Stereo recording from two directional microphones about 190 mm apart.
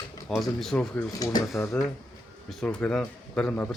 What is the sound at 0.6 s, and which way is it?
Speech, 5° left (ahead or behind).